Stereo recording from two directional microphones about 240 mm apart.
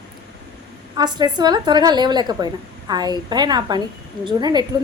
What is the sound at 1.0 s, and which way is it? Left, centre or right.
A woman's voice, centre.